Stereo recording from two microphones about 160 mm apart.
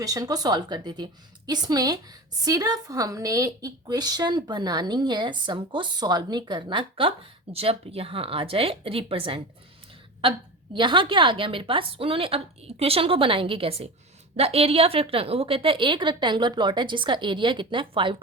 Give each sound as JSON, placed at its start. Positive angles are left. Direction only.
{"t": 0.0, "sound": "a woman's voice", "side_deg": -20}
{"t": 10.8, "sound": "a woman's voice", "side_deg": -30}